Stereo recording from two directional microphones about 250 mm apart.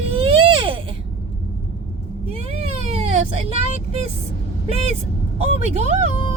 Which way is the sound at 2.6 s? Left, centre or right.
Right.